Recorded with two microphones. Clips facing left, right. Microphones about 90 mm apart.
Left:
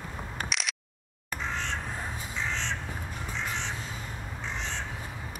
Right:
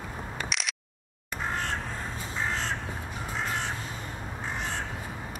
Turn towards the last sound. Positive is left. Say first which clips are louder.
# right 3 dB
turn(degrees=-45)  # may be behind; listen again after turning